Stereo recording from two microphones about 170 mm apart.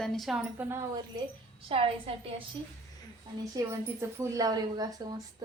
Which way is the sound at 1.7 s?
35° right (ahead or behind).